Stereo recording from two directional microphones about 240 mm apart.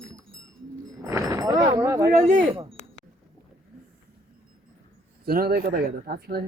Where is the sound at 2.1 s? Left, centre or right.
Right.